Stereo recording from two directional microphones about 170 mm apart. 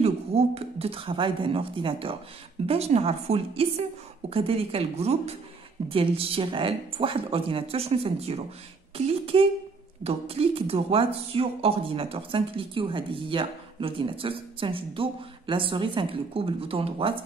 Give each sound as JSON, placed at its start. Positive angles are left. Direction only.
{"t": 0.0, "sound": "speech", "side_deg": -35}